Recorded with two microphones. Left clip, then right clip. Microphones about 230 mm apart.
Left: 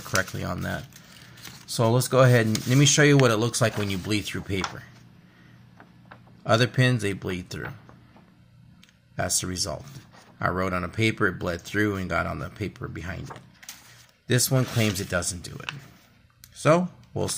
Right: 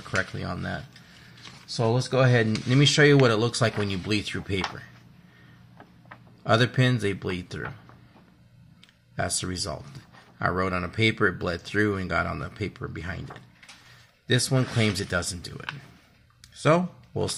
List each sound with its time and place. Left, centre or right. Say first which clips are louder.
0.1 s speech: left 2 dB; centre
1.7 s speech: left 2 dB; left
2.7 s speech: right 1 dB; centre
6.4 s speech: left 1 dB; centre
9.1 s speech: left 1 dB; centre